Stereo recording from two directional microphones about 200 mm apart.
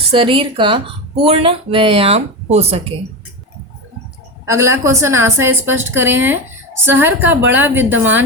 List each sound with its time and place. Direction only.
0.1 s speech: 25° right (ahead or behind)
4.4 s a woman's voice: 15° right (ahead or behind)